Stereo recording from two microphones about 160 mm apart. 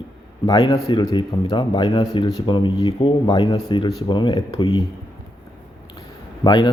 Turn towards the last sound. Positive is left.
turn(degrees=25)  # may be behind; listen again after turning